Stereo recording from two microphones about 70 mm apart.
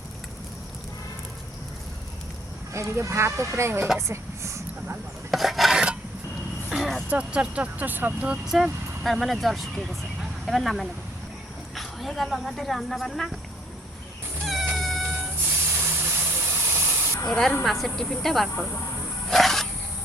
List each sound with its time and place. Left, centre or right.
2.7 s speech: right
5.3 s filing: centre
6.7 s vehicle: centre
7.1 s speech: centre
8.4 s speech: centre
14.4 s cat: centre
15.7 s vehicle: right
17.2 s speech: centre
19.3 s a sound: centre